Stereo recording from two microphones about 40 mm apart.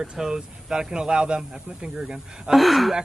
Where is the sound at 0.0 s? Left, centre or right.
Centre.